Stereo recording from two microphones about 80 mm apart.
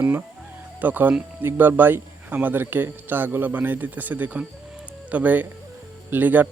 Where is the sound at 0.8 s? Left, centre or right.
Right.